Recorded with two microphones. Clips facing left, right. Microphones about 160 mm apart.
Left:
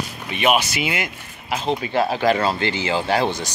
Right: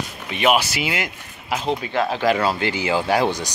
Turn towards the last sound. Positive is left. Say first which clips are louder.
# right 1 dB
turn(degrees=-15)  # may be behind; listen again after turning